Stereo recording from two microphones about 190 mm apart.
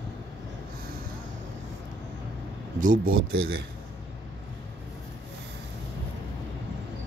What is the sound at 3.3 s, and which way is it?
Speech, 55° right (ahead or behind).